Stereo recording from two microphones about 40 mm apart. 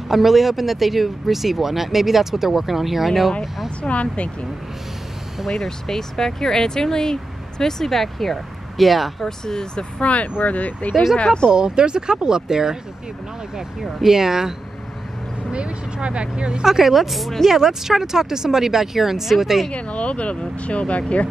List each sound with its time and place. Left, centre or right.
0.1 s speech: centre
3.8 s speech: left
5.5 s speech: centre
9.2 s speech: centre
10.0 s speech: left
11.2 s speech: centre
11.5 s speech: right
15.5 s speech: right
16.6 s speech: centre
17.5 s speech: centre
19.7 s speech: left